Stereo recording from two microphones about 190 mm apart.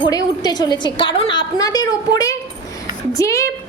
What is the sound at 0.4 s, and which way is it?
A woman's voice, 20° left (ahead or behind).